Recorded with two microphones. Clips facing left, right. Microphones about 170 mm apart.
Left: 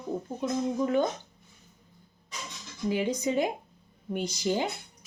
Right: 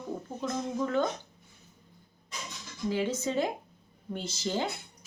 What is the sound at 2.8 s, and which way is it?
Speech, 15° left (ahead or behind).